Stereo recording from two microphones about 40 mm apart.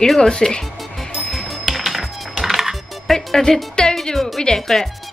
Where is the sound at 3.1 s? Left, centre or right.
Centre.